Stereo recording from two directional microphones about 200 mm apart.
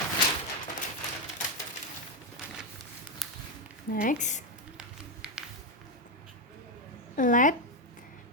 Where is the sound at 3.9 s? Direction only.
45° left (ahead or behind).